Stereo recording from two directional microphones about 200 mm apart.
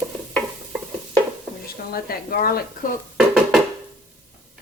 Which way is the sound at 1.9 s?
50° left (ahead or behind).